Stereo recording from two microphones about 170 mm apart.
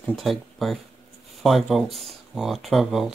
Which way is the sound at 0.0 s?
Centre (ahead or behind).